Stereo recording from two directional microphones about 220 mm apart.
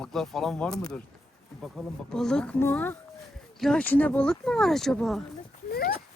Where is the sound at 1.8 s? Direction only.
Centre (ahead or behind).